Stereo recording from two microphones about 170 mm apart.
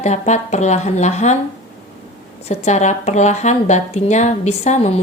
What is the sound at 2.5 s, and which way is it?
A woman's voice, 40° left (ahead or behind).